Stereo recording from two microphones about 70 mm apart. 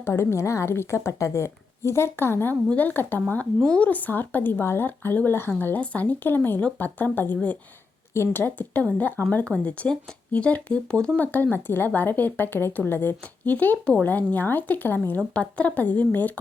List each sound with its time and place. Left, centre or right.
0.0 s a woman's voice: left; by 11.1 s centre
11.2 s a woman's voice: left